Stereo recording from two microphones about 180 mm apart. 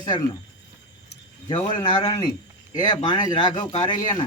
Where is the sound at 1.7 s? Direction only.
20° left (ahead or behind).